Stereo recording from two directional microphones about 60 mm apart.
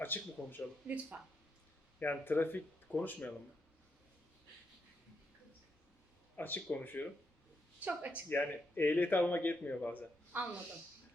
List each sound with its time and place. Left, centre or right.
0.0 s speech: left
1.1 s speech: right
2.0 s speech: left
6.3 s speech: left
7.9 s speech: right
8.3 s speech: left
10.3 s speech: right